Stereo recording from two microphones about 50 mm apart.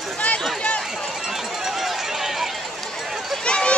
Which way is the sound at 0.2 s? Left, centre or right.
Left.